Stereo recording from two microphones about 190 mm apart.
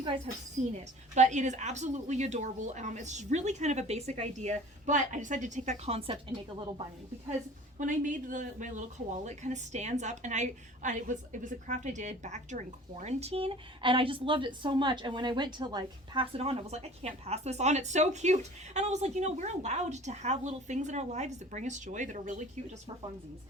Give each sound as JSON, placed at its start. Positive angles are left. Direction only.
{"t": 0.3, "sound": "a woman's voice", "side_deg": -40}
{"t": 7.8, "sound": "a woman's voice", "side_deg": -40}